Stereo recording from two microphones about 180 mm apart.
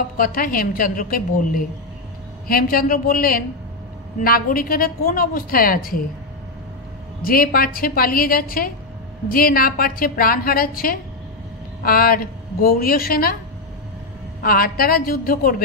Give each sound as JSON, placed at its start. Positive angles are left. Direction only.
{"t": 0.2, "sound": "a woman's voice", "side_deg": 50}
{"t": 7.2, "sound": "a woman's voice", "side_deg": 55}
{"t": 14.4, "sound": "a woman's voice", "side_deg": 55}